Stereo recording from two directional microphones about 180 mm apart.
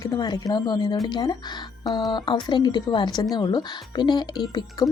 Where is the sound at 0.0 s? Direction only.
20° left (ahead or behind).